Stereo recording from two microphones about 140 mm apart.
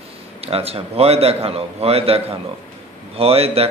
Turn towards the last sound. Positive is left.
turn(degrees=-45)  # may be behind; listen again after turning